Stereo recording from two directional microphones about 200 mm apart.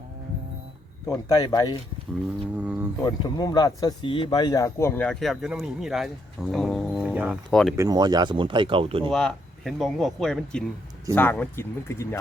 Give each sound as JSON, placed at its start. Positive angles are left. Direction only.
{"t": 1.0, "sound": "speech", "side_deg": 15}
{"t": 2.6, "sound": "speech", "side_deg": -5}
{"t": 3.0, "sound": "speech", "side_deg": 20}
{"t": 7.8, "sound": "speech", "side_deg": -20}
{"t": 9.1, "sound": "speech", "side_deg": 0}